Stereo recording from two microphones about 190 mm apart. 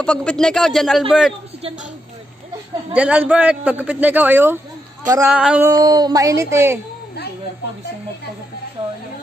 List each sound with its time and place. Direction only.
0.0 s speech: 5° left (ahead or behind)
2.9 s a man's voice: 5° right (ahead or behind)
5.0 s a sound: 20° right (ahead or behind)
5.3 s speech: 5° right (ahead or behind)
5.7 s a man's voice: 20° right (ahead or behind)